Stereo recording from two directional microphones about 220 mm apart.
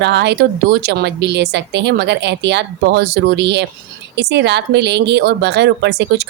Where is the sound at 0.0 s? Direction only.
50° right (ahead or behind).